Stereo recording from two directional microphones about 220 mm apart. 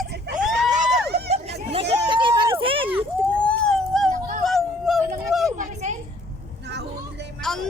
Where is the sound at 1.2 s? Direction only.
25° right (ahead or behind).